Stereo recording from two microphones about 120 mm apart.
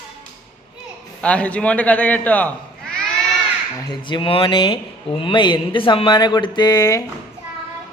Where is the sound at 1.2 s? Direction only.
10° left (ahead or behind).